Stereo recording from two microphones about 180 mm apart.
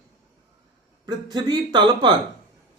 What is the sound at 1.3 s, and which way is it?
Speech, 25° right (ahead or behind).